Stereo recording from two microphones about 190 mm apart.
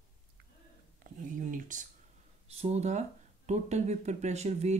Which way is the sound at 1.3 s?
45° right (ahead or behind).